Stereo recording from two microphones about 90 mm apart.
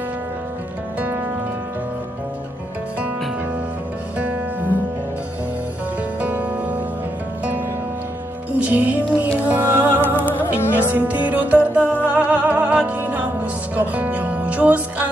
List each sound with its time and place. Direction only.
4.2 s music: 15° right (ahead or behind)
6.2 s music: 15° right (ahead or behind)
8.6 s music: 20° right (ahead or behind)
10.2 s music: 20° left (ahead or behind)
10.8 s music: 20° right (ahead or behind)
11.8 s music: 20° left (ahead or behind)
12.1 s music: 20° right (ahead or behind)